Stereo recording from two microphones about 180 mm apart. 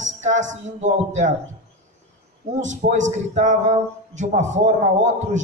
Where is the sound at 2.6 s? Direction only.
40° right (ahead or behind).